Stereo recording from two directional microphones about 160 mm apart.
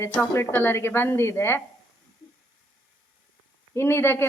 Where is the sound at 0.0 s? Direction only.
10° left (ahead or behind).